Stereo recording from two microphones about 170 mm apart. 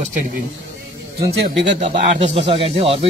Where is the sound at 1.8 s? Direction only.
35° right (ahead or behind).